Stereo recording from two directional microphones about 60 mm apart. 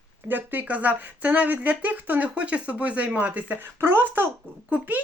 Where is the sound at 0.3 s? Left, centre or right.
Right.